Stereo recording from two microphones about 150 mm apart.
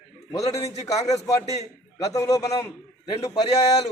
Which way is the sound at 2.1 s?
20° left (ahead or behind).